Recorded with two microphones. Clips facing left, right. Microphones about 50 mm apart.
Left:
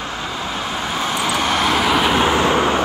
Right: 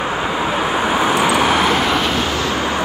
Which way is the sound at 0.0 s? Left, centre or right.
Right.